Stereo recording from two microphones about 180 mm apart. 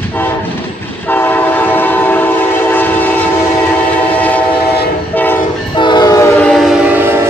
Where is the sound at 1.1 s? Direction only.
10° left (ahead or behind).